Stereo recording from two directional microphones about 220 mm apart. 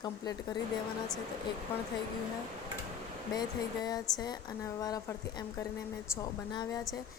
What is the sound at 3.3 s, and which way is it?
Speech, 15° left (ahead or behind).